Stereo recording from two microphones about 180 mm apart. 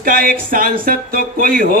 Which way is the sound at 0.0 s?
50° right (ahead or behind).